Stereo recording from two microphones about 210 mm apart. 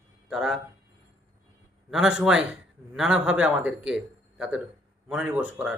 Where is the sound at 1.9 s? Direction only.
5° right (ahead or behind).